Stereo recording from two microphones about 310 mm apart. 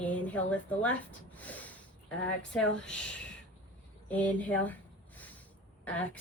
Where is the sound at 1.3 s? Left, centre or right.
Centre.